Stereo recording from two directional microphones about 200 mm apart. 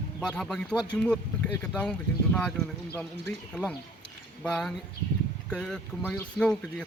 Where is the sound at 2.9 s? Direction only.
5° left (ahead or behind).